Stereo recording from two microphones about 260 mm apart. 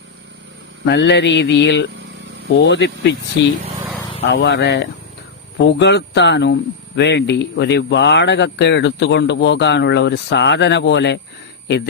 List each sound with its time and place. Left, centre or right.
0.9 s speech: left